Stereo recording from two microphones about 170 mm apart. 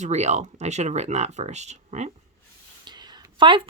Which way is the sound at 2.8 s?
25° right (ahead or behind).